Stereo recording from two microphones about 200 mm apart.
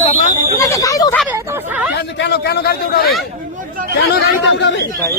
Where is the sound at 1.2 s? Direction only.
5° right (ahead or behind).